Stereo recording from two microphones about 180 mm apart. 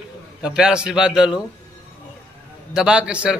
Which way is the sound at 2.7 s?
5° right (ahead or behind).